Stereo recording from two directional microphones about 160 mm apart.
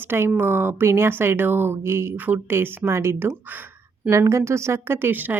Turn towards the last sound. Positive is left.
turn(degrees=-10)  # may be behind; listen again after turning